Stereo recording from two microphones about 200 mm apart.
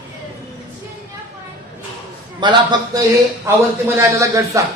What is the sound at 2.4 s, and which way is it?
Speech, 25° right (ahead or behind).